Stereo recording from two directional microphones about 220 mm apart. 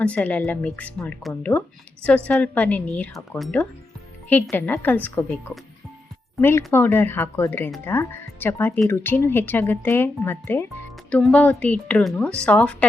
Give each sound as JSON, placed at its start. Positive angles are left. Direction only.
{"t": 0.0, "sound": "a woman's voice", "side_deg": 5}